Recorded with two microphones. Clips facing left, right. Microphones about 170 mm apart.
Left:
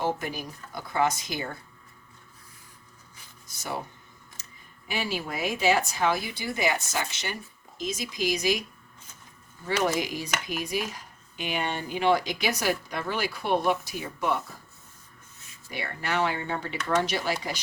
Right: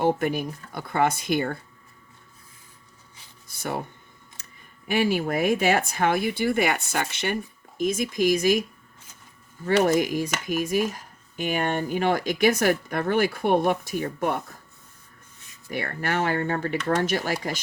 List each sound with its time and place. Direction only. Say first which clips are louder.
0.0 s speech: right 7 dB; 60° right (ahead or behind)
3.4 s speech: right 4 dB; 55° right (ahead or behind)
4.4 s a sound: right 1 dB; 55° right (ahead or behind)
4.9 s speech: right 8 dB; 55° right (ahead or behind)
9.6 s speech: right 6 dB; 50° right (ahead or behind)
15.7 s speech: right 3 dB; 50° right (ahead or behind)